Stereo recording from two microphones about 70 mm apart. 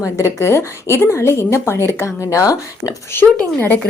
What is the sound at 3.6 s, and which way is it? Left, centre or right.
Speech, left.